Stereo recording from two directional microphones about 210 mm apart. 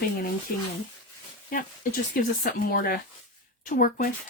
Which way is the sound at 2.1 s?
45° left (ahead or behind).